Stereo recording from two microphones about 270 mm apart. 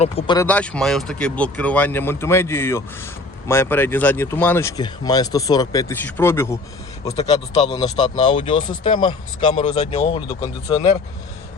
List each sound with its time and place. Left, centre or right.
0.0 s speech: centre
0.4 s speech: centre
7.1 s speech: left